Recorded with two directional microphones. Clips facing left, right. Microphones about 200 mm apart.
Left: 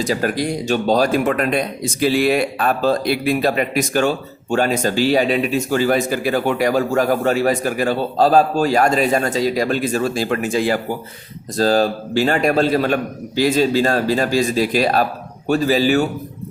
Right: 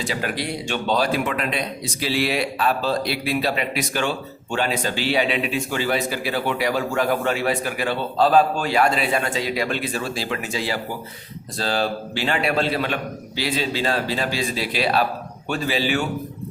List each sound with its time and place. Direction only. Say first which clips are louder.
0.0 s speech: left 7 dB; 40° left (ahead or behind)